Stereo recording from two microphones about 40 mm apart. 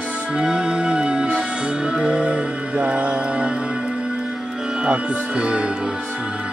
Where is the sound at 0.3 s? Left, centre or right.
Right.